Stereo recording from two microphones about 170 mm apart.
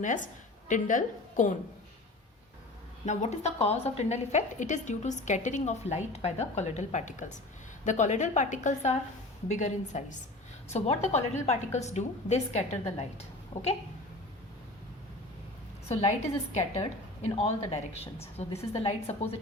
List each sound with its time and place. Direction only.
0.0 s a woman's voice: 50° left (ahead or behind)
3.1 s a woman's voice: 40° left (ahead or behind)
15.9 s a woman's voice: 40° left (ahead or behind)
17.2 s a woman's voice: 35° left (ahead or behind)